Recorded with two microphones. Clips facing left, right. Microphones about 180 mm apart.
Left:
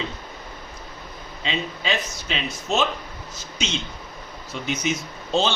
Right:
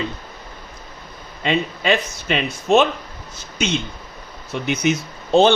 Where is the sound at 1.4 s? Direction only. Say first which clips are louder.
Right 7 dB; 55° right (ahead or behind).